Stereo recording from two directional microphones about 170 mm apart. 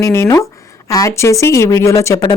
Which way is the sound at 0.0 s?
15° left (ahead or behind).